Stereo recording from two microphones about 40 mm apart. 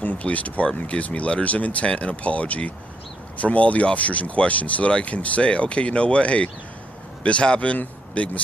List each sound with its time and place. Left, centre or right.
0.0 s speech: left